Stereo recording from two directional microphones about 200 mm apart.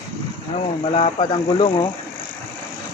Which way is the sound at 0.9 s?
25° left (ahead or behind).